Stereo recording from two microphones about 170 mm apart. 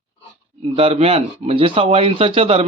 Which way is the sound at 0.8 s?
35° right (ahead or behind).